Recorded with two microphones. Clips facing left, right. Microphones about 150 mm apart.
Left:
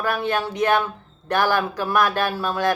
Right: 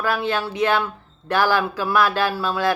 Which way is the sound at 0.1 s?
50° left (ahead or behind).